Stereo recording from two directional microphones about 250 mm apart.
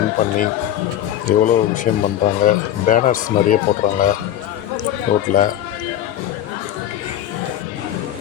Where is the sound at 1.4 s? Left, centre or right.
Left.